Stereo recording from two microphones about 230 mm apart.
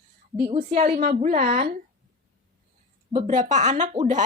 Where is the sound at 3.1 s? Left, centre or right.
Right.